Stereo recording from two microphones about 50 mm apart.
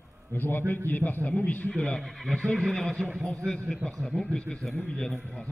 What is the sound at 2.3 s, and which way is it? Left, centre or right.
A man's voice, centre.